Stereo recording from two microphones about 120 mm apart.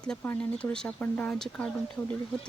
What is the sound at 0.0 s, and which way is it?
Speech, 5° left (ahead or behind).